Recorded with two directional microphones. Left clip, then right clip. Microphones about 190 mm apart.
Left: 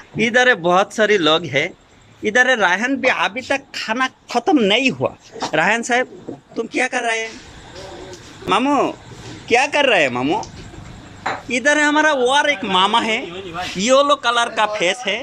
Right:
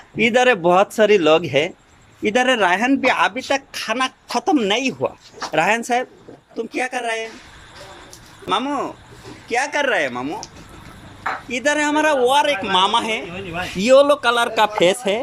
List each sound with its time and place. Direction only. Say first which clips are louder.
0.2 s speech: left 1 dB; 5° right (ahead or behind)
8.4 s speech: left 5 dB; 5° left (ahead or behind)
11.4 s speech: left 4 dB; centre (ahead or behind); by 15.2 s 20° right (ahead or behind)